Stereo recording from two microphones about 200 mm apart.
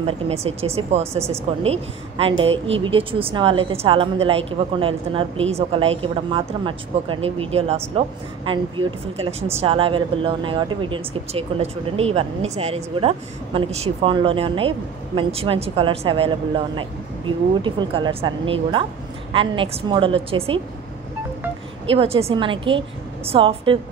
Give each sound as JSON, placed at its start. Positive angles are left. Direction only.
{"t": 0.0, "sound": "speech", "side_deg": -30}
{"t": 21.9, "sound": "speech", "side_deg": -30}